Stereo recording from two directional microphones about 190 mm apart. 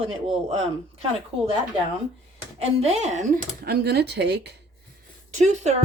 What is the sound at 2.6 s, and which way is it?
Speech, 35° right (ahead or behind).